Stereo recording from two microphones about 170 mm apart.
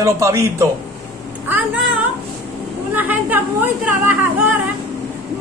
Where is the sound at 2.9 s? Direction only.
10° right (ahead or behind).